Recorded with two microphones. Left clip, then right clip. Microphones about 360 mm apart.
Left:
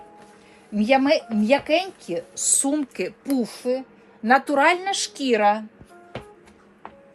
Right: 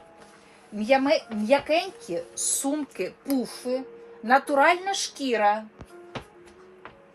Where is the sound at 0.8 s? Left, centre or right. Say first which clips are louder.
Left 3 dB; left.